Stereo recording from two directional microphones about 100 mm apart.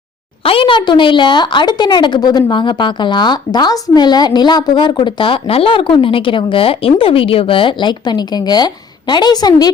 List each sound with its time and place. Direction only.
0.4 s a woman's voice: 65° left (ahead or behind); by 9.6 s 40° left (ahead or behind)